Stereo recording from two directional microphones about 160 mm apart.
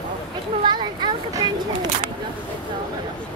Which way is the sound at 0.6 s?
25° right (ahead or behind).